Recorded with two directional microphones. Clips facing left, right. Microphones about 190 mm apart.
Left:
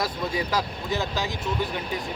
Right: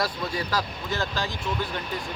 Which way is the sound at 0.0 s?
20° left (ahead or behind).